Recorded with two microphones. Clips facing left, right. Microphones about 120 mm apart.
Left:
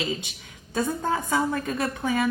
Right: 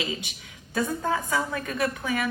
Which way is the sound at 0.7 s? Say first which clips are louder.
Left 1 dB; 25° left (ahead or behind).